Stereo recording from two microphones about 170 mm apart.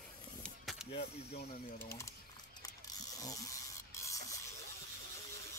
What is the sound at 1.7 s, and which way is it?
Rub, 15° left (ahead or behind).